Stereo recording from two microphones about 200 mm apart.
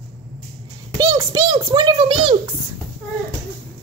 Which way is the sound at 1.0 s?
20° right (ahead or behind).